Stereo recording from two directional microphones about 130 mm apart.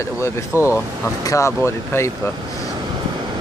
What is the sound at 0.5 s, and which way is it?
Speech, 20° left (ahead or behind).